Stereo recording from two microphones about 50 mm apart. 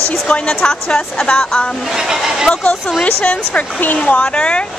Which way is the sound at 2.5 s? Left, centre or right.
Left.